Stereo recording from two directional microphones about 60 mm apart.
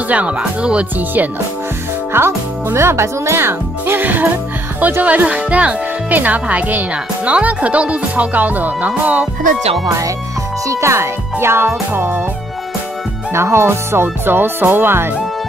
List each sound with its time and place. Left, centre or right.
0.1 s speech: right
0.9 s speech: right
2.1 s a child's voice: right
9.8 s speech: right
10.7 s speech: right
13.3 s speech: right